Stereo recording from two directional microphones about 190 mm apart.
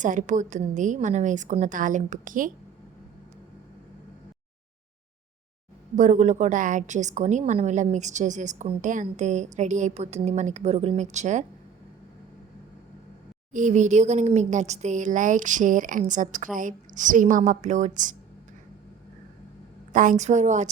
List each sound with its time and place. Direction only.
0.0 s a woman's voice: 40° right (ahead or behind)
6.0 s a woman's voice: 40° right (ahead or behind)
13.5 s a woman's voice: 40° right (ahead or behind)
19.9 s a woman's voice: 40° right (ahead or behind)